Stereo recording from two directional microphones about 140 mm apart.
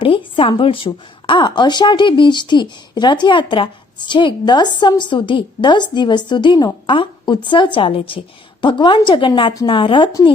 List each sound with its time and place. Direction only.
0.0 s speech: 40° left (ahead or behind)